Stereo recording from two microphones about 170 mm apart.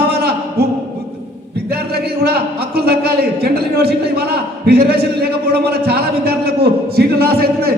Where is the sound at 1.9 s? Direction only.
65° right (ahead or behind).